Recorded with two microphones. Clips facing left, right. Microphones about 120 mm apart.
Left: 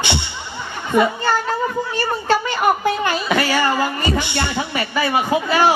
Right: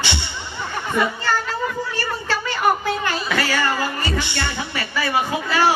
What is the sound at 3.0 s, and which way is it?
Speech, 20° left (ahead or behind).